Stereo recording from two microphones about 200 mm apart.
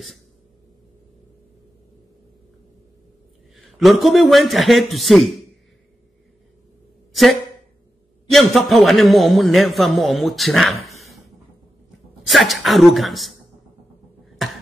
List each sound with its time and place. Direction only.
3.5 s a man's voice: centre (ahead or behind)
7.1 s a sound: centre (ahead or behind)
8.3 s a man's voice: centre (ahead or behind)
12.3 s a man's voice: centre (ahead or behind)